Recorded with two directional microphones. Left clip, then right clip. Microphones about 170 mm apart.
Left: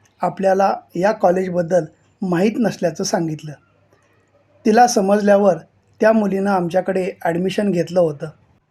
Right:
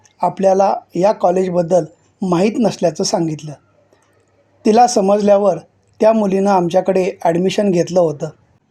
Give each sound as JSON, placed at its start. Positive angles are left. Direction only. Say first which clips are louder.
{"t": 0.2, "sound": "a man's voice", "louder": "right 3 dB", "side_deg": -15}
{"t": 4.6, "sound": "a man's voice", "louder": "right 2 dB", "side_deg": -15}